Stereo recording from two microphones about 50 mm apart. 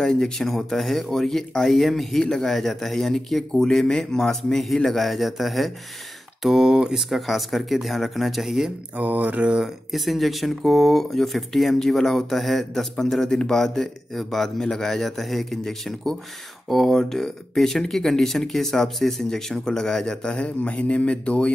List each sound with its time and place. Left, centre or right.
0.0 s speech: centre
8.9 s mantra: right
9.8 s speech: centre; by 21.5 s left